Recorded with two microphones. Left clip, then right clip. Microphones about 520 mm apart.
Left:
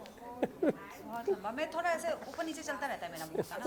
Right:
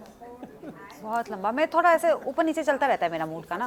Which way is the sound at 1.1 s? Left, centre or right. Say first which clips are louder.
Right 9 dB; right.